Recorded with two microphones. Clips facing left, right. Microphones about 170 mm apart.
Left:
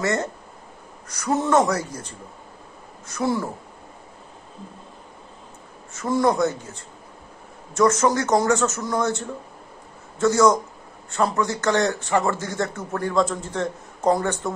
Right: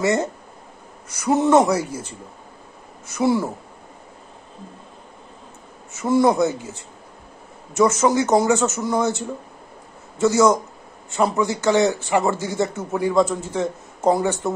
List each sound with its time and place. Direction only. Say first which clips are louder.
0.0 s speech: right 4 dB; 10° right (ahead or behind)
5.9 s speech: right 3 dB; 5° right (ahead or behind)
7.7 s speech: right 2 dB; 5° right (ahead or behind)
10.1 s speech: right 1 dB; 10° right (ahead or behind)